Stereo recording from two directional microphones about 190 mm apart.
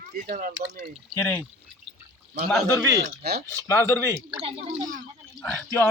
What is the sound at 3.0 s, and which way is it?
Speech, 60° right (ahead or behind).